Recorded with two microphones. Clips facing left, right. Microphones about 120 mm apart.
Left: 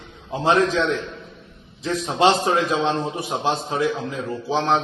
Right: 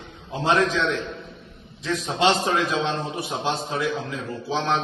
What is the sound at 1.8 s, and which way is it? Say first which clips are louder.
A man's voice: left 3 dB; 40° left (ahead or behind).